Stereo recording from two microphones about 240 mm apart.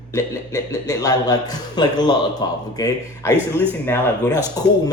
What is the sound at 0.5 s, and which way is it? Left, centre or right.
A man's voice, centre.